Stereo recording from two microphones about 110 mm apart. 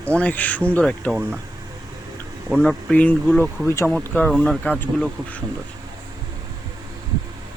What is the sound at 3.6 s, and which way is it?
Speech, 25° left (ahead or behind).